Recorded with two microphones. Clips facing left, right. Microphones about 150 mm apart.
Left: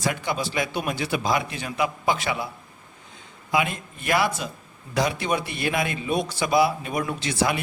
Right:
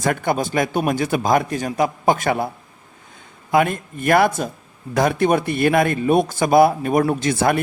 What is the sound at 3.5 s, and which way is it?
A man's voice, 50° right (ahead or behind).